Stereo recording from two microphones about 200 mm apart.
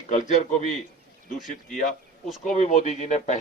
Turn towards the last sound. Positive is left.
turn(degrees=35)  # may be behind; listen again after turning